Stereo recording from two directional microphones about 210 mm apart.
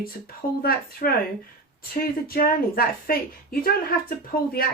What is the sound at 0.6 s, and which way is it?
A woman's voice, 45° left (ahead or behind).